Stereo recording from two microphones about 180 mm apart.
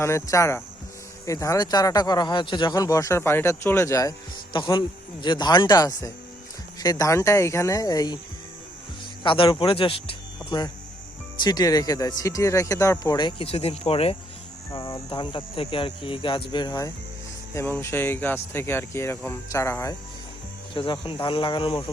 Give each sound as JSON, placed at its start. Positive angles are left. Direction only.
{"t": 0.0, "sound": "speech", "side_deg": 15}
{"t": 9.2, "sound": "speech", "side_deg": 30}
{"t": 14.8, "sound": "speech", "side_deg": 20}
{"t": 20.7, "sound": "speech", "side_deg": 30}